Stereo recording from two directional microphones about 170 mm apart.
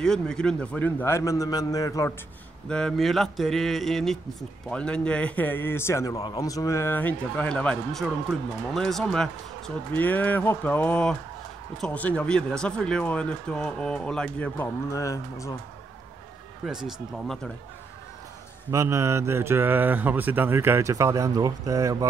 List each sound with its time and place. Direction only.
0.0 s a man's voice: 5° left (ahead or behind)
2.7 s mantra: 5° left (ahead or behind)
4.6 s a man's voice: 5° left (ahead or behind)
8.7 s mantra: 5° left (ahead or behind)
9.9 s a man's voice: 10° left (ahead or behind)
14.9 s speech: 20° left (ahead or behind)
16.6 s mantra: centre (ahead or behind)
18.7 s speech: 15° right (ahead or behind)